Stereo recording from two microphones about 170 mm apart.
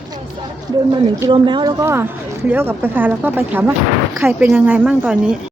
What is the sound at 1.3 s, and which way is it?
Speech, 30° right (ahead or behind).